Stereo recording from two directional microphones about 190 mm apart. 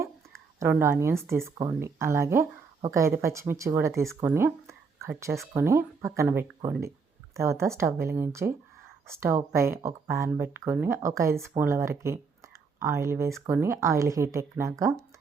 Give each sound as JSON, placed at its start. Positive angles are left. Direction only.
{"t": 0.6, "sound": "speech", "side_deg": -15}